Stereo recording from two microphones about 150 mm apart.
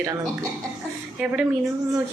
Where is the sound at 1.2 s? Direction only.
5° right (ahead or behind).